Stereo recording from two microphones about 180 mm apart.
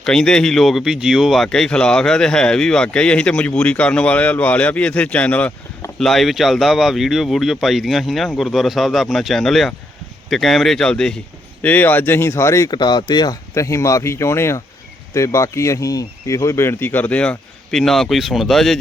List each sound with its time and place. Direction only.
0.0 s speech: 5° left (ahead or behind)